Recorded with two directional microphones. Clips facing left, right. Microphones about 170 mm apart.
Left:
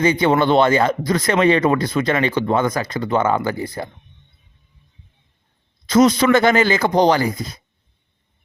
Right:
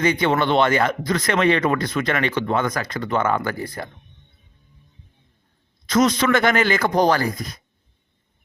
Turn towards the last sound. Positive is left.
turn(degrees=20)  # may be behind; listen again after turning